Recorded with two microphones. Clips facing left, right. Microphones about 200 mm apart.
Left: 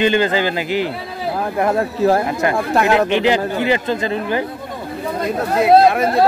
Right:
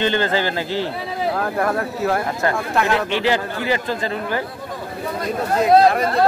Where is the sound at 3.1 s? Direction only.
20° left (ahead or behind).